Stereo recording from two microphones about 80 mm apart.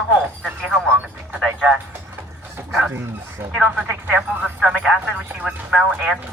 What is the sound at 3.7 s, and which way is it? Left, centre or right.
Speech, centre.